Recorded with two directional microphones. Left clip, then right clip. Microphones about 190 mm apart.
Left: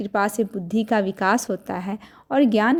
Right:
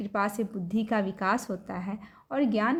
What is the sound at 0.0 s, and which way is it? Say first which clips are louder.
A woman's voice: left 7 dB; 30° left (ahead or behind).